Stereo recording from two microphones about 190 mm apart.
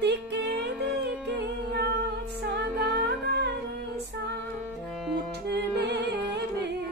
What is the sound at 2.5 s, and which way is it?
Music, 60° right (ahead or behind).